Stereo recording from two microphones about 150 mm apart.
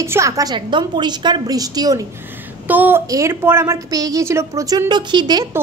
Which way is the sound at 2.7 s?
10° right (ahead or behind).